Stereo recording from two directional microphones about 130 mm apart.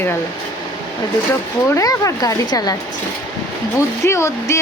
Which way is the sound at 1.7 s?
25° left (ahead or behind).